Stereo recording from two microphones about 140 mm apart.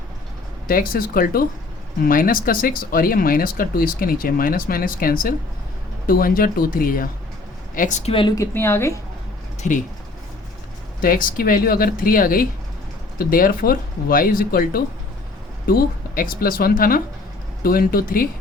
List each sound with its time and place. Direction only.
0.7 s speech: 90° left
7.8 s speech: 60° left (ahead or behind)
8.4 s a woman's voice: 15° left (ahead or behind)
9.6 s speech: 60° left (ahead or behind)
11.0 s speech: 85° left